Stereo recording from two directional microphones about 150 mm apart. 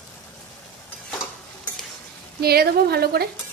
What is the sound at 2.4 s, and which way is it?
Speech, 90° right.